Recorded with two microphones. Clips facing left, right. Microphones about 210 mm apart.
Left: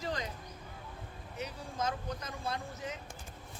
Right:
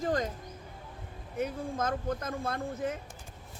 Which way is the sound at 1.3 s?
50° right (ahead or behind).